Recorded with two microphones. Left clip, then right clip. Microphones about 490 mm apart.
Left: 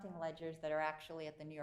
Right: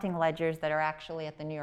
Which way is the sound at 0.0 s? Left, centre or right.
Right.